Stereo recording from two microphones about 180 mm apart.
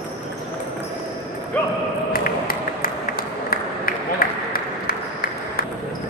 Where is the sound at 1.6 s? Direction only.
10° left (ahead or behind).